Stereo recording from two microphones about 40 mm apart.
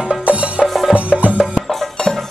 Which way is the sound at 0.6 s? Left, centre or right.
Centre.